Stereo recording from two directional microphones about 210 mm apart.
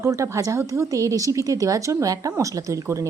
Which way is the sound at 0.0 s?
15° right (ahead or behind).